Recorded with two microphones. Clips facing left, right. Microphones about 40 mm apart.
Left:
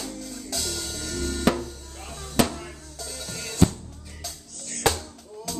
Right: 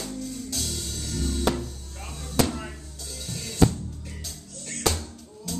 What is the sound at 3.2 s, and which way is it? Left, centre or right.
Music, left.